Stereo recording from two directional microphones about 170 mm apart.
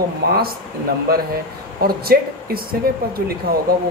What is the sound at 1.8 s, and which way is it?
Speech, 60° right (ahead or behind).